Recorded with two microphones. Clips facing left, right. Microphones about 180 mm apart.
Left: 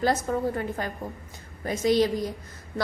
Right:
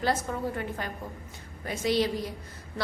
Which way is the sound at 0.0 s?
40° left (ahead or behind).